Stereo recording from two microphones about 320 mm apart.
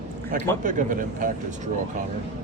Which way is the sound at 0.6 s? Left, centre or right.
Right.